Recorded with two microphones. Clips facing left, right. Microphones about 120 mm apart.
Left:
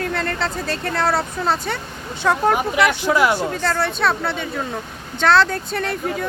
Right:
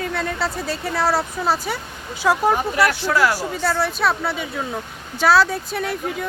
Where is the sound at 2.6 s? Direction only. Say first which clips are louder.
Left 1 dB; 15° left (ahead or behind).